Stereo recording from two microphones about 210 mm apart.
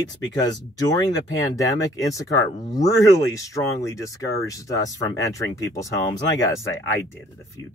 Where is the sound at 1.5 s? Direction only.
15° left (ahead or behind).